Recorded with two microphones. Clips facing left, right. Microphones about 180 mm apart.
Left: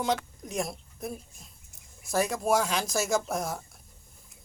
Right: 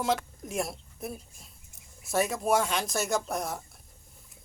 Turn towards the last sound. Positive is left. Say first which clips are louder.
# left 2 dB
turn(degrees=0)  # may be behind; listen again after turning